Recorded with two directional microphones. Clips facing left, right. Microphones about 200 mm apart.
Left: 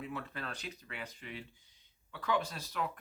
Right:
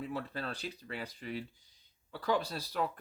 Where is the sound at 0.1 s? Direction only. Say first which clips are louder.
Right 4 dB; 35° right (ahead or behind).